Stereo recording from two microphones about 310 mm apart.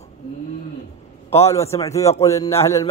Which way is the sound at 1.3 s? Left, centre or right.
Centre.